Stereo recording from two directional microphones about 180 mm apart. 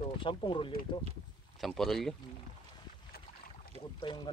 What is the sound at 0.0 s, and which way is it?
Speech, 30° left (ahead or behind).